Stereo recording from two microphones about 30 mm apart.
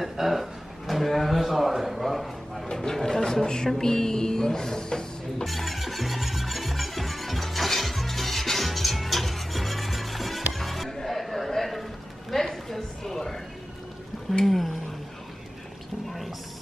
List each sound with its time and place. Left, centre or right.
0.0 s a man's voice: centre
2.7 s speech: centre
5.4 s music: centre
11.1 s a sound: centre
14.4 s speech: centre
16.1 s music: centre